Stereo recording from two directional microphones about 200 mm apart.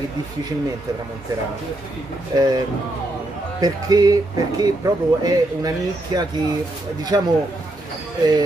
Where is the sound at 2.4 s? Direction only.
20° right (ahead or behind).